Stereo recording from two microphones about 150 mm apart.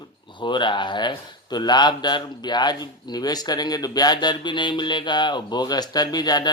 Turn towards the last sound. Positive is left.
turn(degrees=30)  # may be behind; listen again after turning